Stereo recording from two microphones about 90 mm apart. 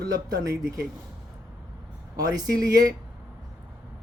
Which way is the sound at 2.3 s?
45° right (ahead or behind).